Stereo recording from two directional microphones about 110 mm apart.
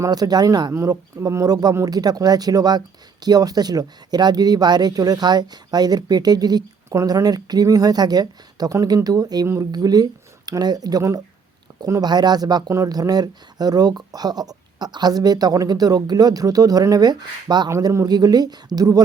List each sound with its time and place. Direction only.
0.0 s speech: 35° right (ahead or behind)